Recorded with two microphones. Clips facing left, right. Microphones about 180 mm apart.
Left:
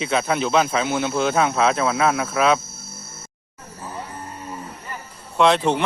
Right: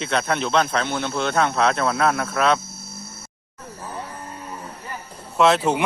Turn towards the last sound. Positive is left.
turn(degrees=-5)  # may be behind; listen again after turning